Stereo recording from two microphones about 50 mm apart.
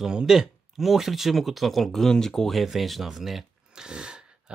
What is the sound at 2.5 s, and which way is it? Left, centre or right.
Speech, centre.